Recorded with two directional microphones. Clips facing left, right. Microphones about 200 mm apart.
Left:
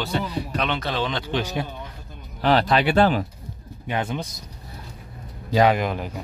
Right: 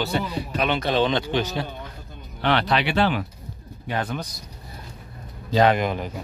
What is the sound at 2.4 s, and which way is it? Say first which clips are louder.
Speech: left 3 dB; 40° left (ahead or behind).